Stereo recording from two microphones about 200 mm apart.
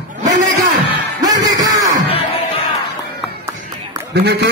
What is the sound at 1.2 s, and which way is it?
Music, 20° right (ahead or behind).